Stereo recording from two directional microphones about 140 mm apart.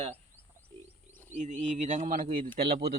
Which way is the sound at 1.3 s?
60° right (ahead or behind).